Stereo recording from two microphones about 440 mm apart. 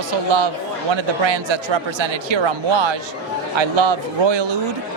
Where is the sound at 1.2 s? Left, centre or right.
Right.